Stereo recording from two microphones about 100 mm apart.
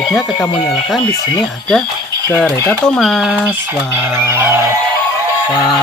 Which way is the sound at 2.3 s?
25° left (ahead or behind).